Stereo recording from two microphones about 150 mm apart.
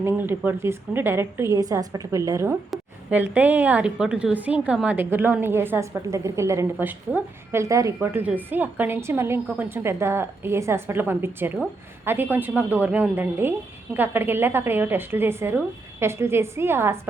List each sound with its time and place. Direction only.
0.0 s a woman's voice: 15° right (ahead or behind)